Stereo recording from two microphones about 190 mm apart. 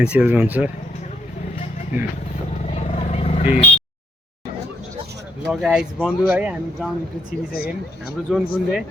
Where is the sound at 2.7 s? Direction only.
35° left (ahead or behind).